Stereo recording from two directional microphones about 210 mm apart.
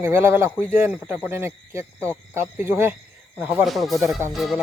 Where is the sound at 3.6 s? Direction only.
Centre (ahead or behind).